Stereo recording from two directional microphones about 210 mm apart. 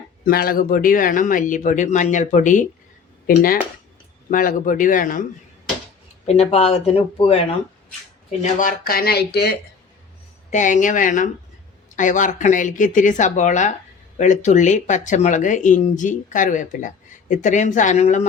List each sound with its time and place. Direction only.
0.3 s speech: 45° left (ahead or behind)
6.2 s speech: 30° left (ahead or behind)
8.4 s speech: 40° left (ahead or behind)
10.5 s speech: 35° left (ahead or behind)